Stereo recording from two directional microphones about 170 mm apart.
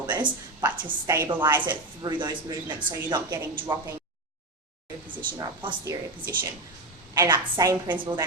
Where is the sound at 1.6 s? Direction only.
25° right (ahead or behind).